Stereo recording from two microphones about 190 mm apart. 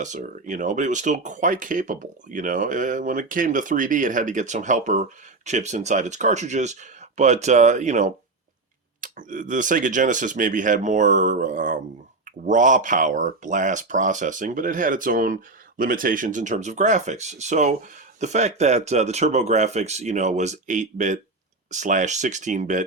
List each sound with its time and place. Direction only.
0.0 s speech: 40° right (ahead or behind)